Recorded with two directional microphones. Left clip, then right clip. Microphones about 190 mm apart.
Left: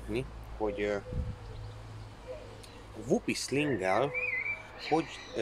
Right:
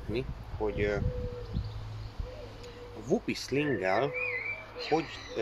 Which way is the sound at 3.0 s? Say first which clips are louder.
Even; 15° left (ahead or behind).